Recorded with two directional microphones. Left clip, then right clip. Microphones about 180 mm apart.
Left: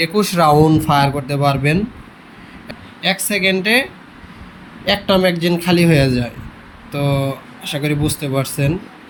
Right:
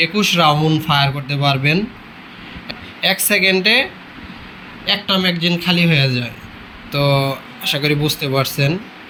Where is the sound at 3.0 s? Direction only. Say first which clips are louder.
Right 2 dB; 10° left (ahead or behind); by 6.3 s 25° left (ahead or behind).